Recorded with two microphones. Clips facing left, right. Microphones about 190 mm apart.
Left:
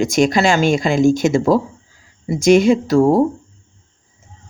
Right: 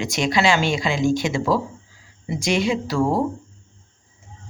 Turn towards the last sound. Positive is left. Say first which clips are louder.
# left 8 dB
turn(degrees=45)  # may be behind; listen again after turning